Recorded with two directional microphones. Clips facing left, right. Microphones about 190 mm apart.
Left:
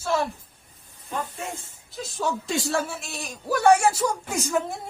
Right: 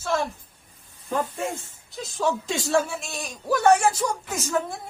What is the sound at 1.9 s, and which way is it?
A man's voice, centre (ahead or behind).